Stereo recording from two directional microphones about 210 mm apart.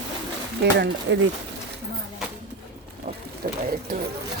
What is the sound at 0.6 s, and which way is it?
Speech, 55° right (ahead or behind).